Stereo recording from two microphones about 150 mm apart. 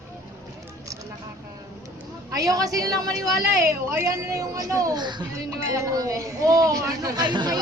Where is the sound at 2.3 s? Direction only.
25° right (ahead or behind).